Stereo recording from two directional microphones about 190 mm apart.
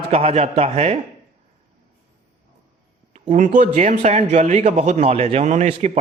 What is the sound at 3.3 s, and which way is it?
A man's voice, 40° right (ahead or behind).